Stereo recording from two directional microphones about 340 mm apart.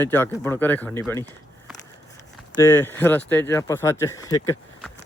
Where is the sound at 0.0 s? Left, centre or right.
Centre.